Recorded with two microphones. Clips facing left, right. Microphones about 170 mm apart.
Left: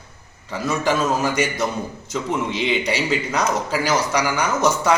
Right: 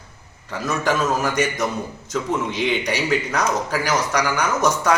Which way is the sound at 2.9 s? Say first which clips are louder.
Even; 20° left (ahead or behind).